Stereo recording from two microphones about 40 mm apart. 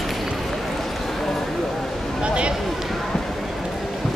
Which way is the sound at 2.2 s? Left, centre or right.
Right.